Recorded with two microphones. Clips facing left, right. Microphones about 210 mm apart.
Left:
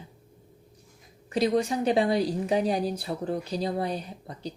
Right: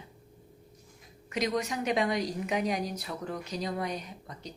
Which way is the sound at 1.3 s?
30° left (ahead or behind).